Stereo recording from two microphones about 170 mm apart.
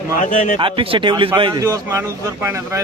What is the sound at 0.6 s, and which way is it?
A man's voice, 30° right (ahead or behind).